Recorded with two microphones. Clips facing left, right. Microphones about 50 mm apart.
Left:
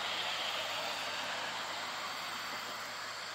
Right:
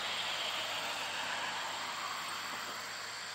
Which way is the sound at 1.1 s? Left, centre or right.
Right.